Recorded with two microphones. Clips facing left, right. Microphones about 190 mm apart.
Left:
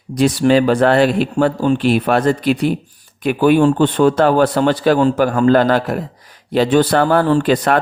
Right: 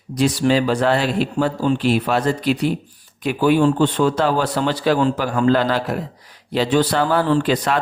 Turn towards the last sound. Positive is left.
turn(degrees=50)  # may be behind; listen again after turning